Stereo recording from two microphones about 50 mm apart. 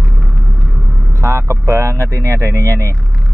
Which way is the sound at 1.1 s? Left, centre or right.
Right.